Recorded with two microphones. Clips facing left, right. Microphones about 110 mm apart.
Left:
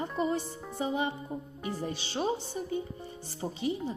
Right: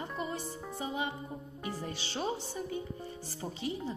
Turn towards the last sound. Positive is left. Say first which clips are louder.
# left 5 dB
turn(degrees=20)  # may be behind; listen again after turning